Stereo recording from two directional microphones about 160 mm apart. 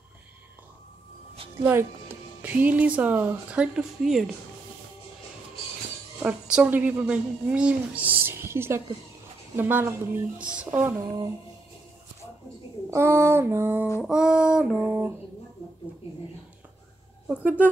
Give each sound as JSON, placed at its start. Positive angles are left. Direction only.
{"t": 1.3, "sound": "music", "side_deg": -35}
{"t": 2.4, "sound": "speech", "side_deg": -10}
{"t": 6.1, "sound": "a woman's voice", "side_deg": -5}
{"t": 12.9, "sound": "speech", "side_deg": -15}
{"t": 14.0, "sound": "child singing", "side_deg": -5}
{"t": 17.3, "sound": "a woman's voice", "side_deg": -10}